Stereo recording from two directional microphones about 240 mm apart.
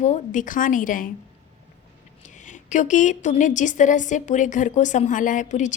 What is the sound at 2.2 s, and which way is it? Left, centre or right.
A woman's voice, left.